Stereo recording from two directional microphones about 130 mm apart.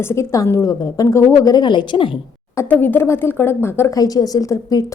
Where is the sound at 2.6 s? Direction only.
15° left (ahead or behind).